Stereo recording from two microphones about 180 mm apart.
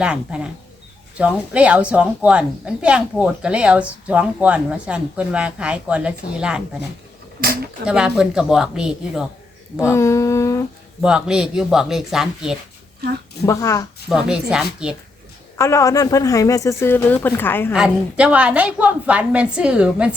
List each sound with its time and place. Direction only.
0.0 s a woman's voice: 5° right (ahead or behind)
7.9 s speech: 5° right (ahead or behind)
9.8 s speech: 15° left (ahead or behind)
11.0 s speech: 5° right (ahead or behind)
13.4 s speech: 15° left (ahead or behind)
14.1 s speech: 5° right (ahead or behind)
15.5 s speech: 15° left (ahead or behind)
17.7 s a woman's voice: 5° right (ahead or behind)